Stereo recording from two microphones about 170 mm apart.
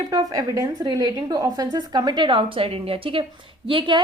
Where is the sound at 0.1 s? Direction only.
20° right (ahead or behind).